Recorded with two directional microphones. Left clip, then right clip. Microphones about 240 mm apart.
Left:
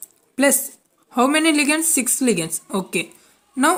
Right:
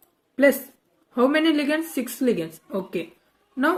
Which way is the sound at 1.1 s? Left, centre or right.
Left.